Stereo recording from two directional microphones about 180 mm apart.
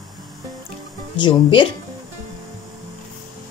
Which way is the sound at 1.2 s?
25° left (ahead or behind).